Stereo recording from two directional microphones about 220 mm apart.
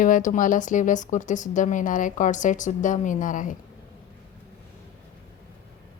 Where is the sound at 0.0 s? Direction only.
35° left (ahead or behind).